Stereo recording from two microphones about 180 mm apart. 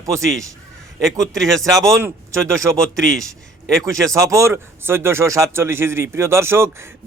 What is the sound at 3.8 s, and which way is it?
Speech, 15° right (ahead or behind).